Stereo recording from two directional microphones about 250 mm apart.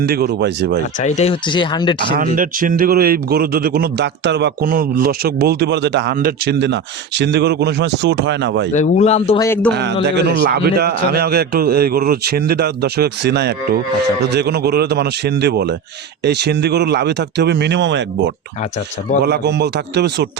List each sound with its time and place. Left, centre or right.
0.0 s speech: right
0.9 s speech: left
2.1 s speech: right
8.7 s speech: left
9.4 s a man's voice: centre
9.7 s speech: right